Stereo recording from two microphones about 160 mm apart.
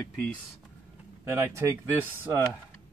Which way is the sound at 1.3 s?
15° right (ahead or behind).